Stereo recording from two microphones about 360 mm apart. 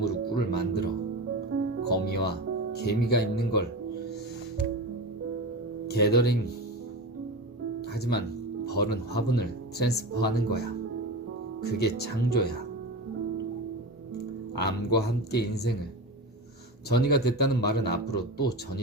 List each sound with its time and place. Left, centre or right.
0.0 s music: left
1.5 s music: right
1.9 s music: left
2.8 s speech: left
5.9 s speech: left
7.9 s speech: left
11.6 s speech: left
14.6 s speech: left
16.9 s speech: left